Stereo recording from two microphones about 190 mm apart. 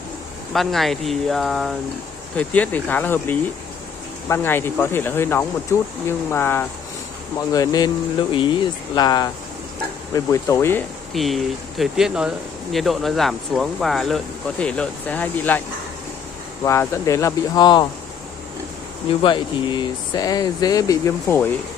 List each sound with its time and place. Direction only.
0.5 s speech: centre (ahead or behind)
11.1 s speech: centre (ahead or behind)
16.6 s speech: 15° left (ahead or behind)
19.2 s speech: 25° left (ahead or behind)